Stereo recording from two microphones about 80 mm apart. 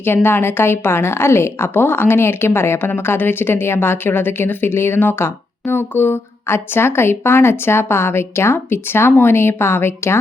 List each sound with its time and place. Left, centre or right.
0.0 s a woman's voice: left